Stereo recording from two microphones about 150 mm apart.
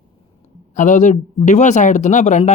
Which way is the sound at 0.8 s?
55° left (ahead or behind).